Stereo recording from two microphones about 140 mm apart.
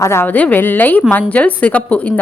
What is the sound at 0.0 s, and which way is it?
Speech, 20° left (ahead or behind).